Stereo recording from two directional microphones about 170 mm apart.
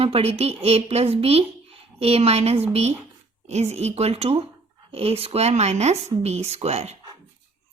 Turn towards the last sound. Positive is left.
turn(degrees=-40)  # may be behind; listen again after turning